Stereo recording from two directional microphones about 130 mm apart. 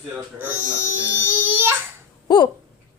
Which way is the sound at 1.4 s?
15° right (ahead or behind).